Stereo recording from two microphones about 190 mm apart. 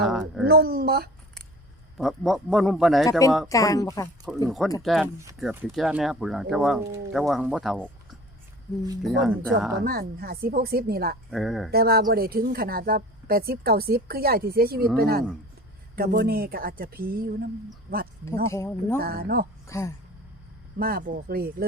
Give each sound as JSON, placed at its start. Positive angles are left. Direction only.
{"t": 0.0, "sound": "speech", "side_deg": 0}
{"t": 0.4, "sound": "speech", "side_deg": -55}
{"t": 2.0, "sound": "speech", "side_deg": 0}
{"t": 3.1, "sound": "speech", "side_deg": 15}
{"t": 4.4, "sound": "speech", "side_deg": 0}
{"t": 9.0, "sound": "speech", "side_deg": 0}
{"t": 9.8, "sound": "speech", "side_deg": -50}
{"t": 11.3, "sound": "speech", "side_deg": 0}
{"t": 11.7, "sound": "speech", "side_deg": -55}
{"t": 18.5, "sound": "speech", "side_deg": 15}
{"t": 18.9, "sound": "speech", "side_deg": -50}
{"t": 19.6, "sound": "speech", "side_deg": 15}
{"t": 20.7, "sound": "speech", "side_deg": -50}